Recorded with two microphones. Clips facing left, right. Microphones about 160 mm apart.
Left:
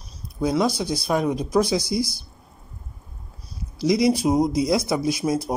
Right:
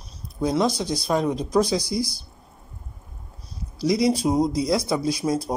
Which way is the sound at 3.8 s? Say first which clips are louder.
Left 1 dB; 15° left (ahead or behind).